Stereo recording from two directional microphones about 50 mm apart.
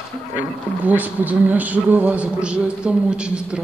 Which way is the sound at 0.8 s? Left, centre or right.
Right.